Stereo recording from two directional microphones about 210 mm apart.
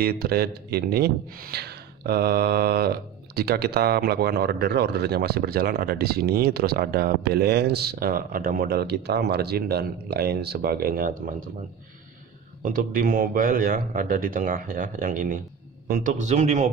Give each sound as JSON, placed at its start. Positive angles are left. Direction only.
{"t": 0.0, "sound": "speech", "side_deg": -50}
{"t": 12.6, "sound": "a man's voice", "side_deg": -40}